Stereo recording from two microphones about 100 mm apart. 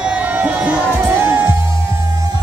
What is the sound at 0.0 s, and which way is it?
Music, 15° right (ahead or behind).